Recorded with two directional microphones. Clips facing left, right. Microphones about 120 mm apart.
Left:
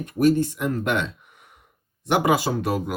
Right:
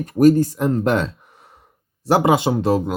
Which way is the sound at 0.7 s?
35° right (ahead or behind).